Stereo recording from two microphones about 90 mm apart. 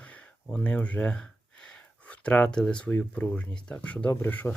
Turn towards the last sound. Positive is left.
turn(degrees=20)  # may be behind; listen again after turning